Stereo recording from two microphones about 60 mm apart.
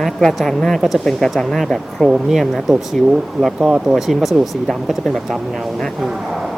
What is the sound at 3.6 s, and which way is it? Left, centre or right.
Speech, centre.